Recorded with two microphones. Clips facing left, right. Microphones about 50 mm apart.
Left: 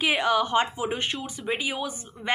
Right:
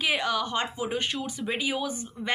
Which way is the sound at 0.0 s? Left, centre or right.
Centre.